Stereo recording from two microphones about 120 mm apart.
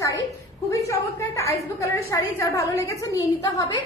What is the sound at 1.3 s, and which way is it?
A woman's voice, 25° left (ahead or behind).